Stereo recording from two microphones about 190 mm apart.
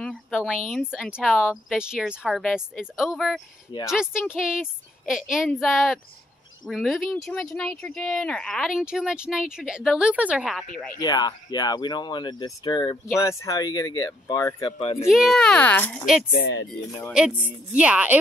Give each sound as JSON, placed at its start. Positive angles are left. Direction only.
{"t": 0.0, "sound": "speech", "side_deg": 5}
{"t": 11.0, "sound": "speech", "side_deg": 20}
{"t": 14.8, "sound": "speech", "side_deg": 30}
{"t": 15.0, "sound": "speech", "side_deg": 0}
{"t": 16.3, "sound": "speech", "side_deg": 70}
{"t": 17.1, "sound": "a woman's voice", "side_deg": -5}